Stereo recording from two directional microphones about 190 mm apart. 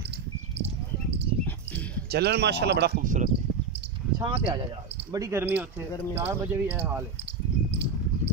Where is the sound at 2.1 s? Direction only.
60° right (ahead or behind).